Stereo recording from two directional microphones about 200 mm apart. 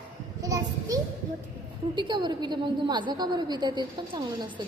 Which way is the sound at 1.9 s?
20° right (ahead or behind).